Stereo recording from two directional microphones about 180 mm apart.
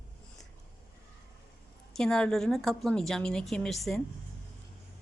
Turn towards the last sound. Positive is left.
turn(degrees=0)  # may be behind; listen again after turning